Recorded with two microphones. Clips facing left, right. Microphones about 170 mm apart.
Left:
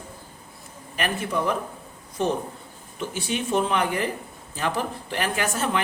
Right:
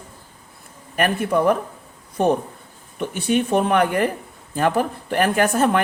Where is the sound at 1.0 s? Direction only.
55° right (ahead or behind).